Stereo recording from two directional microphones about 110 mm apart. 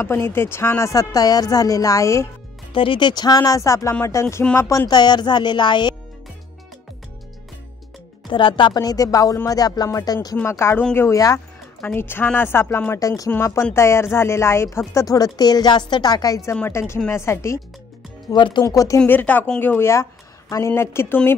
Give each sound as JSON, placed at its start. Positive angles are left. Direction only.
{"t": 0.0, "sound": "speech", "side_deg": 20}
{"t": 2.7, "sound": "speech", "side_deg": 50}
{"t": 8.3, "sound": "speech", "side_deg": 50}
{"t": 10.3, "sound": "speech", "side_deg": 25}
{"t": 10.8, "sound": "speech", "side_deg": 10}
{"t": 11.1, "sound": "speech", "side_deg": 30}
{"t": 11.8, "sound": "speech", "side_deg": 20}
{"t": 18.3, "sound": "speech", "side_deg": 45}
{"t": 19.0, "sound": "speech", "side_deg": 15}